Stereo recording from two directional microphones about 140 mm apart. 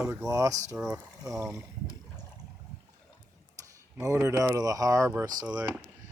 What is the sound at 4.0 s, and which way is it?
Speech, 20° right (ahead or behind).